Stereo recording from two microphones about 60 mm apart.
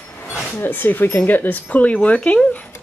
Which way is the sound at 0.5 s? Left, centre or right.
Left.